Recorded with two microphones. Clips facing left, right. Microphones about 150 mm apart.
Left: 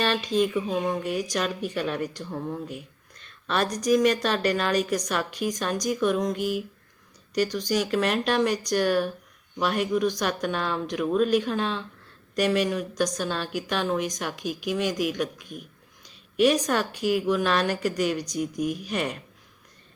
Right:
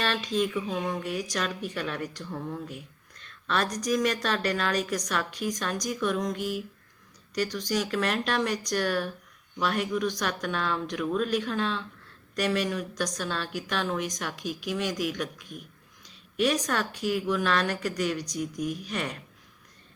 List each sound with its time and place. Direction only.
0.0 s a woman's voice: centre (ahead or behind)
2.3 s speech: 20° left (ahead or behind)
3.5 s a woman's voice: 5° left (ahead or behind)
7.7 s a woman's voice: 5° left (ahead or behind)
13.1 s speech: 30° left (ahead or behind)
13.4 s a woman's voice: 5° left (ahead or behind)
16.4 s a woman's voice: 5° left (ahead or behind)